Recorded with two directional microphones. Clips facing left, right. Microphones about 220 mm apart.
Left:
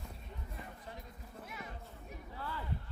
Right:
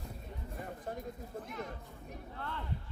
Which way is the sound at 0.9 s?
45° right (ahead or behind).